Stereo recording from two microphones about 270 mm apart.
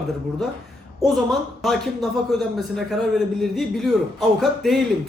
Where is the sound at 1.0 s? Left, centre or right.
Centre.